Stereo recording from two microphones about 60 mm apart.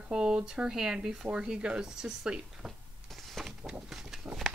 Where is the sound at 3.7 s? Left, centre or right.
Centre.